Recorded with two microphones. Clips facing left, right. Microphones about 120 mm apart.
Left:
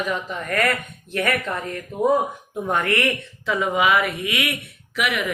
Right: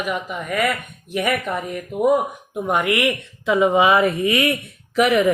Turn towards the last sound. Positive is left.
turn(degrees=-40)  # may be behind; listen again after turning